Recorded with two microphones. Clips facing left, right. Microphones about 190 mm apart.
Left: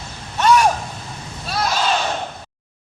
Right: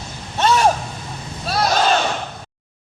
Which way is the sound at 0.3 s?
25° right (ahead or behind).